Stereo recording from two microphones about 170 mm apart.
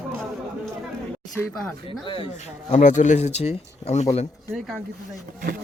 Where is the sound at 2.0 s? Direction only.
30° left (ahead or behind).